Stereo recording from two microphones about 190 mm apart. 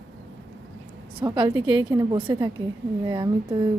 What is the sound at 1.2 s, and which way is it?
Speech, 25° right (ahead or behind).